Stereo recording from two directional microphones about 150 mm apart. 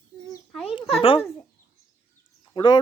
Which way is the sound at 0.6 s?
40° left (ahead or behind).